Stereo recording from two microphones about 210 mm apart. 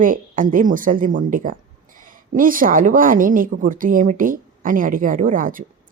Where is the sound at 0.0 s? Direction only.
40° right (ahead or behind).